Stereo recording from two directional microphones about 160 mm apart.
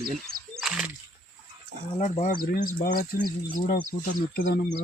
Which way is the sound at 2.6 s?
60° left (ahead or behind).